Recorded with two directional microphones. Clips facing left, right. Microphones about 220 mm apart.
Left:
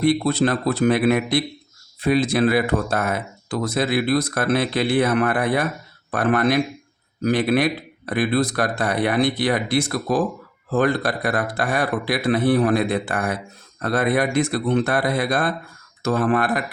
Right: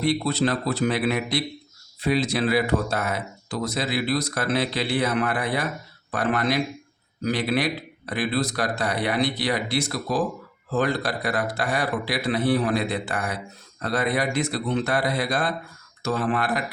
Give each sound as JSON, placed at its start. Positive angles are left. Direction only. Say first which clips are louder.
{"t": 0.0, "sound": "speech", "louder": "left 4 dB", "side_deg": 50}